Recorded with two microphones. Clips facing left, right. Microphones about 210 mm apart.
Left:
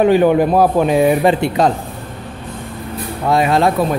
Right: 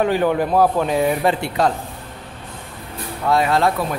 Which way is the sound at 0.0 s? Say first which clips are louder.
Left 6 dB; 15° left (ahead or behind).